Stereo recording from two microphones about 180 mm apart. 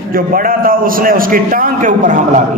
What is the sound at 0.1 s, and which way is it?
A man's voice, 50° right (ahead or behind).